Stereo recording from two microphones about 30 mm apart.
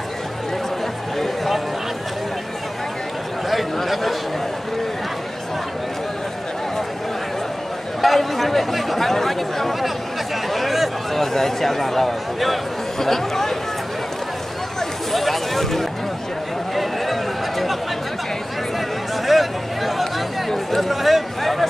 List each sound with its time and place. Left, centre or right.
3.7 s speech: centre
8.0 s speech: centre
10.5 s a sound: centre
11.1 s speech: centre
15.1 s a sound: centre
19.2 s chatter: centre